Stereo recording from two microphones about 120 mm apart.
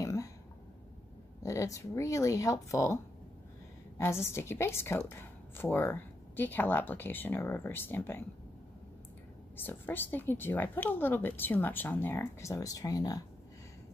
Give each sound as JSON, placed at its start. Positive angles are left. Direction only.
{"t": 0.0, "sound": "throat clearing", "side_deg": 25}
{"t": 1.4, "sound": "speech", "side_deg": 25}
{"t": 4.3, "sound": "speech", "side_deg": 20}
{"t": 9.6, "sound": "speech", "side_deg": 15}